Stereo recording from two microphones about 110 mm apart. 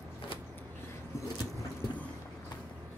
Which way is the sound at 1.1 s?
25° left (ahead or behind).